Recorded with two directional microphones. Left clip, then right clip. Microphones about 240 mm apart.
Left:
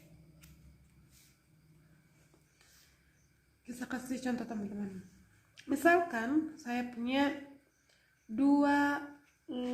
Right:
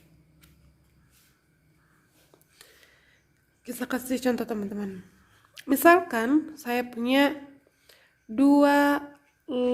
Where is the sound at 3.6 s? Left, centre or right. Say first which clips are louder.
Right 10 dB; right.